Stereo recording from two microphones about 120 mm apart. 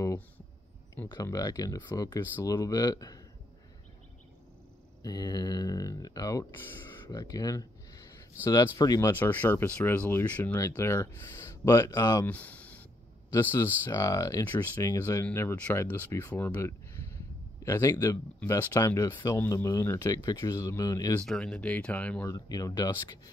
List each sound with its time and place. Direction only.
1.0 s speech: 35° left (ahead or behind)
5.0 s speech: 35° left (ahead or behind)
7.1 s a sound: 30° left (ahead or behind)
8.7 s speech: 30° left (ahead or behind)
9.1 s speech: 15° left (ahead or behind)
12.3 s a sound: 10° left (ahead or behind)
13.3 s speech: 20° left (ahead or behind)
18.4 s speech: 15° left (ahead or behind)
21.2 s speech: 5° left (ahead or behind)
22.3 s speech: 30° left (ahead or behind)